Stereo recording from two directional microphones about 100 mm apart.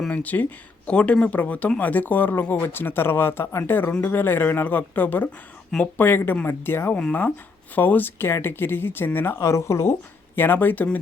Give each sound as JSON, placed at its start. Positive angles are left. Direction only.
{"t": 0.1, "sound": "speech", "side_deg": 15}